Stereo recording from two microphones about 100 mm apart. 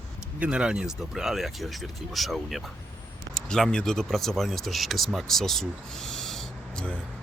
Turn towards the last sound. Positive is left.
turn(degrees=10)  # may be behind; listen again after turning